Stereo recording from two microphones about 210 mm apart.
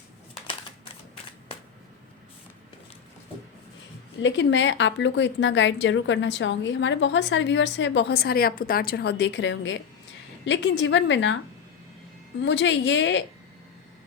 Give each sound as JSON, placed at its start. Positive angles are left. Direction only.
{"t": 4.2, "sound": "a woman's voice", "side_deg": 60}
{"t": 12.4, "sound": "a woman's voice", "side_deg": 60}